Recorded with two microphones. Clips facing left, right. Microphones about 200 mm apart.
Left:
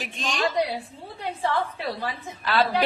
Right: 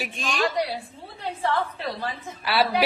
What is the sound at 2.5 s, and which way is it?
Speech, 10° right (ahead or behind).